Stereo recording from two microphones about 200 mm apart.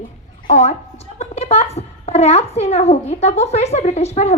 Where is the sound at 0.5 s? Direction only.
35° left (ahead or behind).